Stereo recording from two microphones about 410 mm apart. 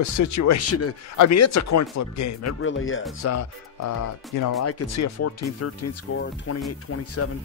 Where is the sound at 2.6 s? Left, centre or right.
Left.